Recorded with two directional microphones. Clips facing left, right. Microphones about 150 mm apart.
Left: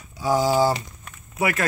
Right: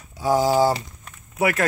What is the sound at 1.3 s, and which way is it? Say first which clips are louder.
Speech: right 2 dB; 55° right (ahead or behind).